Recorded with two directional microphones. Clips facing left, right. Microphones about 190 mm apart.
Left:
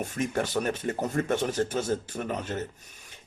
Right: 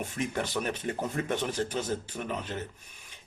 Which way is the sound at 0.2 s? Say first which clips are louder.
Left 4 dB; 45° left (ahead or behind).